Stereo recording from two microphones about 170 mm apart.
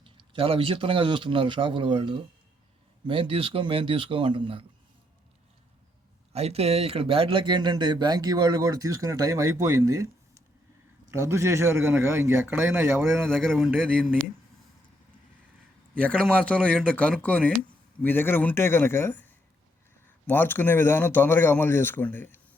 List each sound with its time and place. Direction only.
0.0 s speech: 30° right (ahead or behind)
6.3 s speech: 35° right (ahead or behind); by 10.1 s 20° right (ahead or behind)
11.1 s speech: 15° right (ahead or behind)
13.3 s speech: centre (ahead or behind)
16.0 s speech: 5° left (ahead or behind)